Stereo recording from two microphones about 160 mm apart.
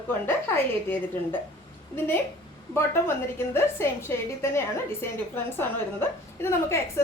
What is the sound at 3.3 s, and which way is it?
A woman's voice, 15° left (ahead or behind).